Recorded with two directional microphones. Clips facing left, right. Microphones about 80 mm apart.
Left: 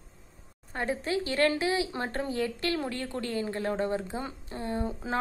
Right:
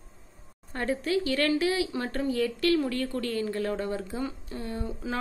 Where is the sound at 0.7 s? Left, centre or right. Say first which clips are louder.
Right 2 dB; centre.